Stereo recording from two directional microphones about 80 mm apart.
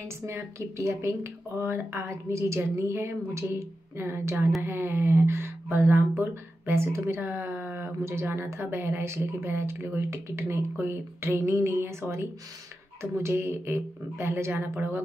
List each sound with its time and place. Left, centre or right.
0.3 s speech: right